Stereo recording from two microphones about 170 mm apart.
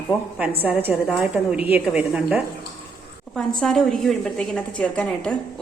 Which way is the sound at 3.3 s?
5° left (ahead or behind).